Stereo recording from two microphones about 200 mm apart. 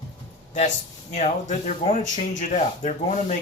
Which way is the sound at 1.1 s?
35° left (ahead or behind).